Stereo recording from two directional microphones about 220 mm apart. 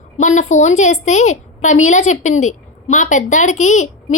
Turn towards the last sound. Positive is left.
turn(degrees=30)  # may be behind; listen again after turning